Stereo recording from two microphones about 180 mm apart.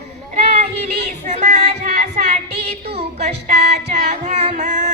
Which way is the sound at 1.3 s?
40° right (ahead or behind).